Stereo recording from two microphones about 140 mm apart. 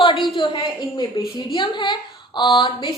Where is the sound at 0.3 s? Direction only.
35° left (ahead or behind).